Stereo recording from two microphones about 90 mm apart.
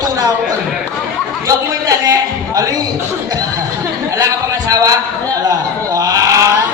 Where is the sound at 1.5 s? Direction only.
40° right (ahead or behind).